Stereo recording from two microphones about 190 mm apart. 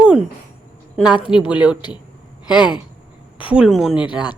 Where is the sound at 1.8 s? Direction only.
25° left (ahead or behind).